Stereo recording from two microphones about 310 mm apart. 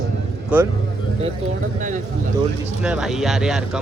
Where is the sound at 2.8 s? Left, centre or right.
Centre.